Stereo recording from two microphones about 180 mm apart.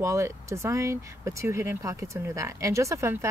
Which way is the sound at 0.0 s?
15° right (ahead or behind).